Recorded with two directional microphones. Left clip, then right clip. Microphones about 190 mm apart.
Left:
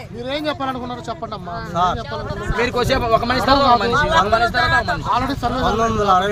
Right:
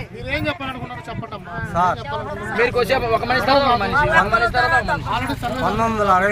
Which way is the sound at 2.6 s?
65° left (ahead or behind).